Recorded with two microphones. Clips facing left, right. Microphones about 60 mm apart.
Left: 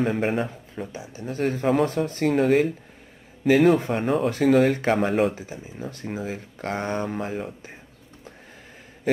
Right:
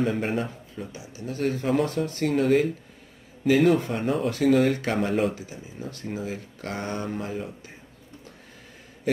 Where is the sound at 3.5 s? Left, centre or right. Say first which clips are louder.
Left 2 dB; centre.